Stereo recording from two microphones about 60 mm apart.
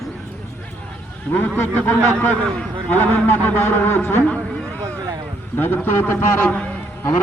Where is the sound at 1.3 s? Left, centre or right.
Left.